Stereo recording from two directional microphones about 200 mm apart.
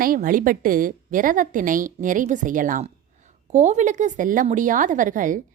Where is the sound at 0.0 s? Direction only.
45° right (ahead or behind).